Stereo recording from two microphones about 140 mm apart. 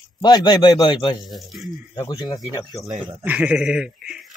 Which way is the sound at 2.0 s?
25° left (ahead or behind).